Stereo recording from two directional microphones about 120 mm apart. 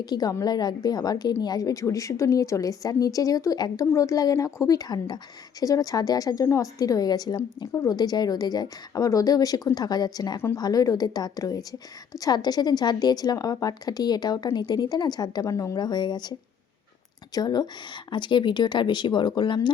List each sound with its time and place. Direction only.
0.0 s a woman's voice: 35° left (ahead or behind)
17.3 s a woman's voice: 35° left (ahead or behind)